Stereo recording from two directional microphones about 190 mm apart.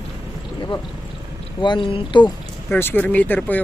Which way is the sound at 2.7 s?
10° left (ahead or behind).